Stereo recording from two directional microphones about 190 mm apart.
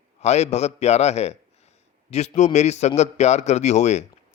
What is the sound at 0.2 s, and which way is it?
A man's voice, 35° left (ahead or behind).